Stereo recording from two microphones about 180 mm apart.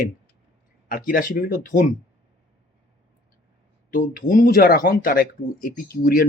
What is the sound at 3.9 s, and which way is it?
Speech, 50° left (ahead or behind).